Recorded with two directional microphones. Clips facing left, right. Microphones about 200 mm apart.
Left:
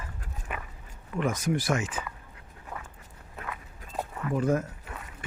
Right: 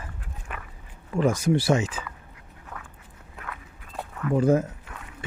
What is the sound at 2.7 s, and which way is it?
Walk, 10° left (ahead or behind).